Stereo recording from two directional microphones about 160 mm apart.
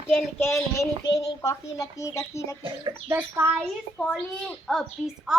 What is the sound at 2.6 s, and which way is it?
Speech, 35° right (ahead or behind).